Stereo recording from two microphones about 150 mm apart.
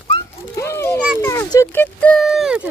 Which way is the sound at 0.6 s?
15° left (ahead or behind).